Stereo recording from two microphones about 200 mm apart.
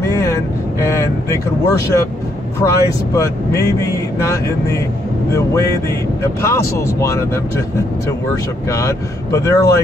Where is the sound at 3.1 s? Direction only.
15° left (ahead or behind).